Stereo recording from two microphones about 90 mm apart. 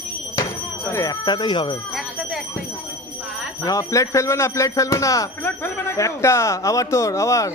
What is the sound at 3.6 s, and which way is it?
Speech, 35° left (ahead or behind).